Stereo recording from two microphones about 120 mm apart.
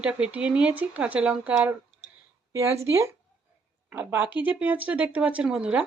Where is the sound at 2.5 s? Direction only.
25° right (ahead or behind); by 5.8 s 5° right (ahead or behind).